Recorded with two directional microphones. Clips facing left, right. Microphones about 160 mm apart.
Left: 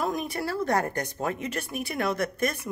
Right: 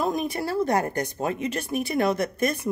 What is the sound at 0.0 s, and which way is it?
Speech, 20° right (ahead or behind).